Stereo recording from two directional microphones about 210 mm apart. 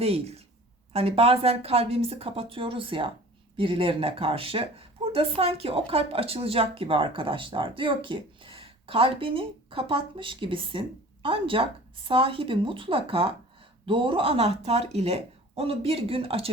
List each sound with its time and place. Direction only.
0.0 s speech: 30° right (ahead or behind)